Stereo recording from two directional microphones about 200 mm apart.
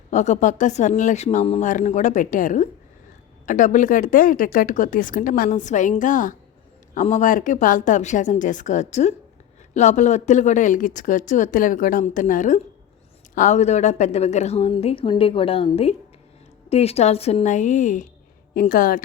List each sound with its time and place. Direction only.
0.1 s speech: 35° left (ahead or behind)